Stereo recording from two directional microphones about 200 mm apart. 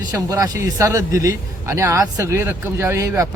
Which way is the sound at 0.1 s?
15° right (ahead or behind).